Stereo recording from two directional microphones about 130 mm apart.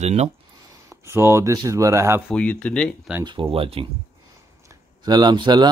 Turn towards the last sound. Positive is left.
turn(degrees=-35)  # may be behind; listen again after turning